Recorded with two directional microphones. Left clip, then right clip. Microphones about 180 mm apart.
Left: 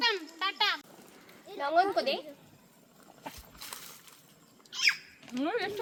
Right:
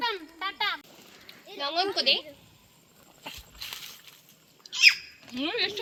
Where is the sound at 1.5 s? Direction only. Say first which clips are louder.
Left 1 dB; 35° left (ahead or behind).